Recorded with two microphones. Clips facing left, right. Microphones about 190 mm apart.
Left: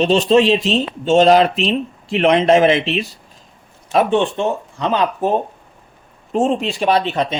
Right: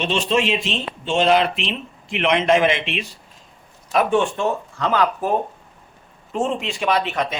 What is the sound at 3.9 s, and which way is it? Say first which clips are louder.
Speech: left 3 dB; 25° left (ahead or behind).